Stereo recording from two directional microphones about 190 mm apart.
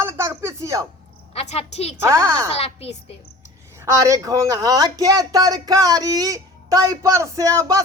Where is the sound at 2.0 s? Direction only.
15° right (ahead or behind).